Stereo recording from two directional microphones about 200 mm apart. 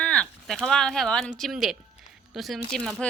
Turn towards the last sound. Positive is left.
turn(degrees=0)  # may be behind; listen again after turning